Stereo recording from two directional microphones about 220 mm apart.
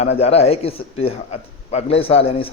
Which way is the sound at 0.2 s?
30° left (ahead or behind).